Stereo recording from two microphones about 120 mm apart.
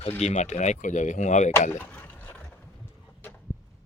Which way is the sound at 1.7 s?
20° left (ahead or behind).